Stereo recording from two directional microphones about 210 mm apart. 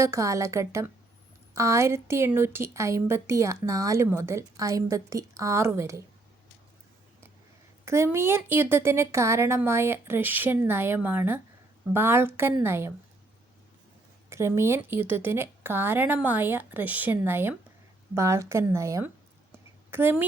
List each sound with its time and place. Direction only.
0.0 s a woman's voice: 15° right (ahead or behind)
7.9 s a woman's voice: 15° right (ahead or behind)
14.3 s a woman's voice: 15° right (ahead or behind)